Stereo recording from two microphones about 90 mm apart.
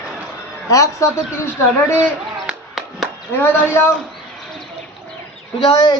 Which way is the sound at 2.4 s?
5° right (ahead or behind).